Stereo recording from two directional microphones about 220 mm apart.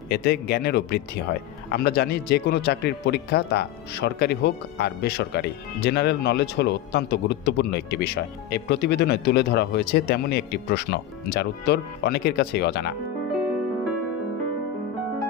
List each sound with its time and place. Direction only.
0.1 s a man's voice: 50° left (ahead or behind)